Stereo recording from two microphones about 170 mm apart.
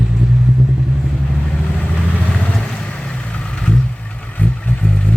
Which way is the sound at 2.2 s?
5° left (ahead or behind).